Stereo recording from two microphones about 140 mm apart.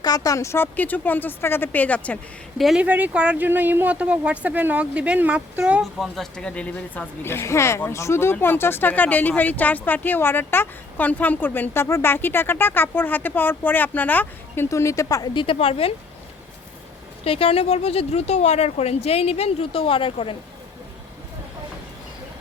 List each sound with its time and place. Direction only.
0.0 s speech: 25° left (ahead or behind); by 2.1 s 10° left (ahead or behind)
2.6 s speech: centre (ahead or behind)
5.8 s speech: centre (ahead or behind); by 16.0 s 45° left (ahead or behind)
17.2 s speech: 45° left (ahead or behind)